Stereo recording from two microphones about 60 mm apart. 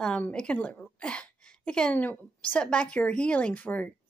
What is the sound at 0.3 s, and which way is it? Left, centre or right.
Speech, centre.